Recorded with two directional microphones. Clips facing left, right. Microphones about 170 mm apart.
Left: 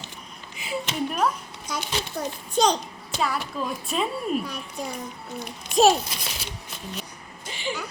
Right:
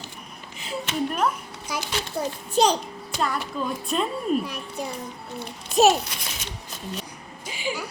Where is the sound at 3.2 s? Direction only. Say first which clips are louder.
Even; 5° left (ahead or behind).